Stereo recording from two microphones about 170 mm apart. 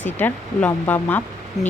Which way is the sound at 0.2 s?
10° left (ahead or behind).